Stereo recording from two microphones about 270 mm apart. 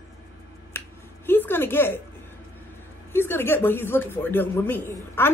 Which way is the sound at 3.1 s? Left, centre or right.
Centre.